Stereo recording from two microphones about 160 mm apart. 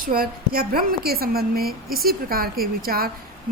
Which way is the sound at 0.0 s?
65° right (ahead or behind).